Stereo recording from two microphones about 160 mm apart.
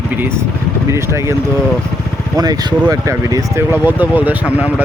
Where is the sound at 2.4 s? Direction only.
25° right (ahead or behind).